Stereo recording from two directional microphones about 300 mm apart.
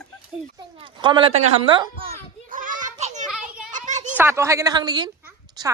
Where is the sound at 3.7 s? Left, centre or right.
Right.